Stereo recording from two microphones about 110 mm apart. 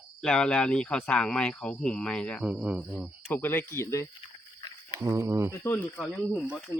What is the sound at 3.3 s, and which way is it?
Speech, 20° left (ahead or behind).